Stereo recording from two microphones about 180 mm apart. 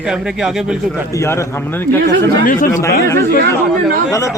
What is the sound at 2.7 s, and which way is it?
A man's voice, 15° left (ahead or behind).